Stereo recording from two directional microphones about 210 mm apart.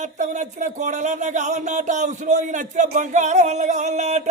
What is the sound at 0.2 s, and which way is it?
Speech, 35° right (ahead or behind).